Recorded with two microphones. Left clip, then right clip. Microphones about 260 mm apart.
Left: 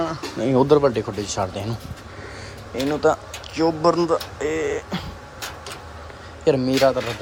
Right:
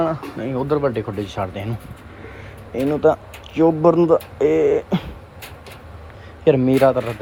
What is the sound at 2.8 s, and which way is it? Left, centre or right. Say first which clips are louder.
Speech: right 3 dB; centre.